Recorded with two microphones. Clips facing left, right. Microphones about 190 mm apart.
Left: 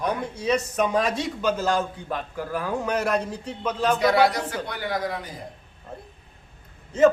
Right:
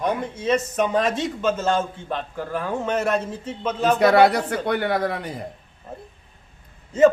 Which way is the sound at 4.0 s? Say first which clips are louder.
Right 6 dB; 55° right (ahead or behind).